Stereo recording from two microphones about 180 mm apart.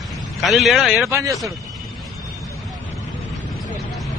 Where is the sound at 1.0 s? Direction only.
15° right (ahead or behind).